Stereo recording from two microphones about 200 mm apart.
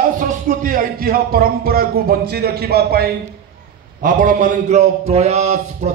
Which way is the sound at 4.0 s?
40° right (ahead or behind).